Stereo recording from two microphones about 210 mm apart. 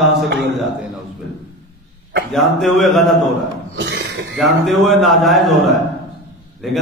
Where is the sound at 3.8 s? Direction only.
55° right (ahead or behind).